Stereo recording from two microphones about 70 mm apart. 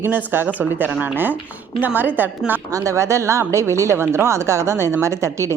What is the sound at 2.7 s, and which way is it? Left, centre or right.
A woman's voice, right.